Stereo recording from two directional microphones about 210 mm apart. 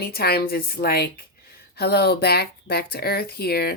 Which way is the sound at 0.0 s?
45° left (ahead or behind).